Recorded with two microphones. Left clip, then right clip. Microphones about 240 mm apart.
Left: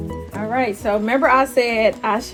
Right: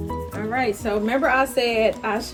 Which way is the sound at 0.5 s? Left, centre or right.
Left.